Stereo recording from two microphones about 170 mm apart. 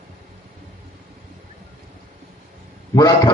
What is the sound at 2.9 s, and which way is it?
Speech, 25° left (ahead or behind).